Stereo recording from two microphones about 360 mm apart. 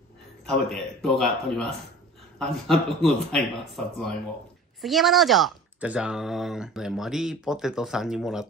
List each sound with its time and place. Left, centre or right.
0.5 s speech: centre